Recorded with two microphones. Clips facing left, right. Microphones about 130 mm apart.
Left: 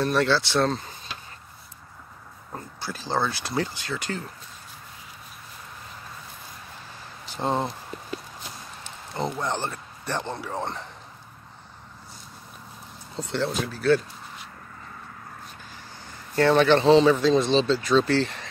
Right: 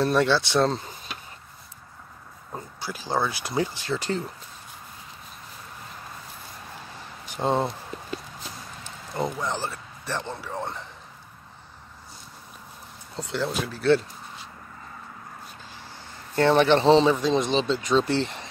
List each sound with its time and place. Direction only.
0.0 s speech: 20° right (ahead or behind)
2.5 s speech: 10° right (ahead or behind)
7.3 s speech: 10° right (ahead or behind)
9.4 s speech: 5° right (ahead or behind)
13.2 s speech: 5° right (ahead or behind)
13.7 s a sound: 25° right (ahead or behind)
16.3 s speech: 25° right (ahead or behind)